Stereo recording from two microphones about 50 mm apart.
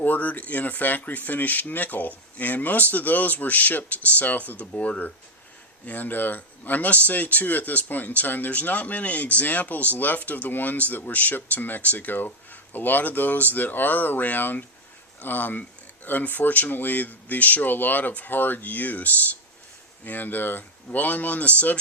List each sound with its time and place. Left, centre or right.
0.0 s speech: left